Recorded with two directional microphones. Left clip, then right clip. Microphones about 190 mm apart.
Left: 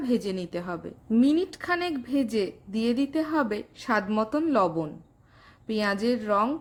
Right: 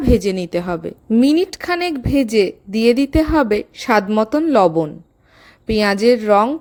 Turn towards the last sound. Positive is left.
turn(degrees=-35)  # may be behind; listen again after turning